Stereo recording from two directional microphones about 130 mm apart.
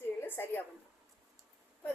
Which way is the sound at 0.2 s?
15° left (ahead or behind).